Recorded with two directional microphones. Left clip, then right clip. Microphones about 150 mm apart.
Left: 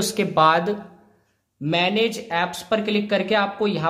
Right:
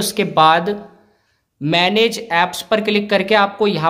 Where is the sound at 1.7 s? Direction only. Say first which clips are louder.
Right 6 dB; 20° right (ahead or behind).